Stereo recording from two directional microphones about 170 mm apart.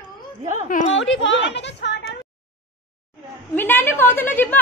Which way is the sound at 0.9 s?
90° left.